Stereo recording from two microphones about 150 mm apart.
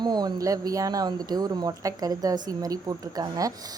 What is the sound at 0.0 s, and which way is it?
A woman's voice, 30° right (ahead or behind).